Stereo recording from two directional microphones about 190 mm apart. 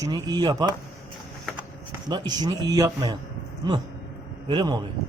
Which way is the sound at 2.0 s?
20° right (ahead or behind).